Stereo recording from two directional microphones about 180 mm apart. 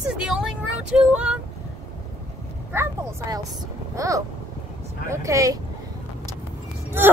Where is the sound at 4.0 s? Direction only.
20° right (ahead or behind).